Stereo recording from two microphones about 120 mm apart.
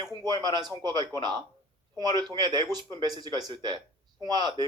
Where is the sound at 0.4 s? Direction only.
35° right (ahead or behind).